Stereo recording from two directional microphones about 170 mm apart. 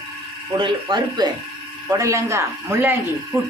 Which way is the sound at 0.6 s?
25° right (ahead or behind).